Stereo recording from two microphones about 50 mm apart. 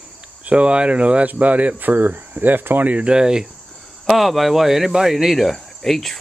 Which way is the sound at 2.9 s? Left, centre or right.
Right.